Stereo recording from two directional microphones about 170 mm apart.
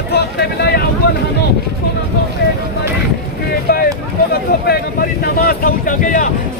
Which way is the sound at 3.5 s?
60° left (ahead or behind).